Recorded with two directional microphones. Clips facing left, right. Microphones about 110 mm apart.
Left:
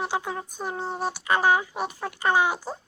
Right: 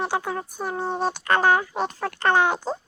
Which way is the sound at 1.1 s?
10° left (ahead or behind).